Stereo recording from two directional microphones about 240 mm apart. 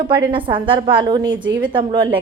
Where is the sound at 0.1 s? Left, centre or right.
Centre.